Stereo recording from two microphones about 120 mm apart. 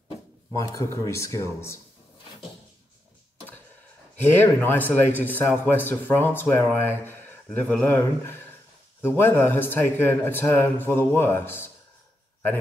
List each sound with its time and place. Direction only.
0.6 s speech: 25° left (ahead or behind)
4.4 s speech: 15° left (ahead or behind)
7.4 s speech: 5° left (ahead or behind)
7.8 s speech: 20° left (ahead or behind)